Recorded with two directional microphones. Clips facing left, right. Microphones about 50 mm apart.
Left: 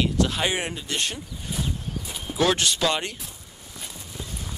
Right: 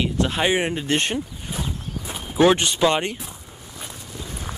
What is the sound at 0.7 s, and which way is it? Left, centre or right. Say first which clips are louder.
Speech: right 7 dB; right.